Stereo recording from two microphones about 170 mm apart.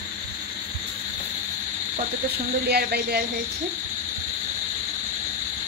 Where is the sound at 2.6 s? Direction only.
70° right (ahead or behind).